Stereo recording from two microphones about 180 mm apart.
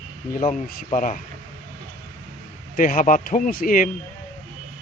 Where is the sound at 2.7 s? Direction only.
50° left (ahead or behind).